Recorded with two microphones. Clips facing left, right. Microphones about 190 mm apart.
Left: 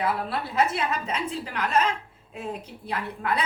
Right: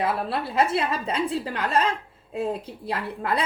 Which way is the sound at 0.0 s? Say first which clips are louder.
Right 2 dB; 30° right (ahead or behind).